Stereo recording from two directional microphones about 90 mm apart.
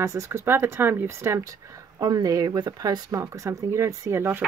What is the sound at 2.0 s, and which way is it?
Speech, 45° right (ahead or behind).